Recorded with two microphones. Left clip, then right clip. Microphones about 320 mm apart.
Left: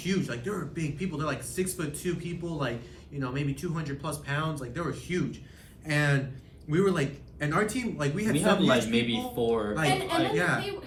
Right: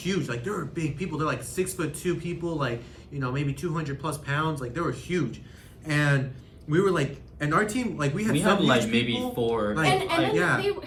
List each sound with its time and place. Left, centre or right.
0.0 s speech: centre